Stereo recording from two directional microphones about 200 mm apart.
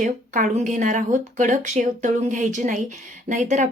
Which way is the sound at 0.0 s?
35° right (ahead or behind).